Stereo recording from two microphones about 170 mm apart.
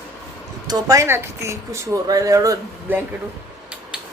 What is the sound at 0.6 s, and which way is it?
Speech, 20° right (ahead or behind).